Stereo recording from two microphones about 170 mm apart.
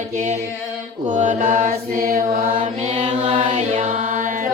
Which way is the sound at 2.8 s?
40° right (ahead or behind).